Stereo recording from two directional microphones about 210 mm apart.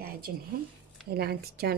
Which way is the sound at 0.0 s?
45° right (ahead or behind).